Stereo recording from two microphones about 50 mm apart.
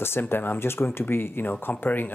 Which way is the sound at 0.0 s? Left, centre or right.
Left.